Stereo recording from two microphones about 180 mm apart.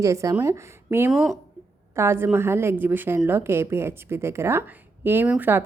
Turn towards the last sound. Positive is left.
turn(degrees=-10)  # may be behind; listen again after turning